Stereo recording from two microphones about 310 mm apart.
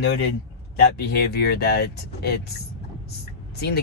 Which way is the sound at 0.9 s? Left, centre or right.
Left.